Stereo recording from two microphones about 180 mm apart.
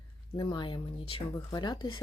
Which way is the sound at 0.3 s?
25° left (ahead or behind).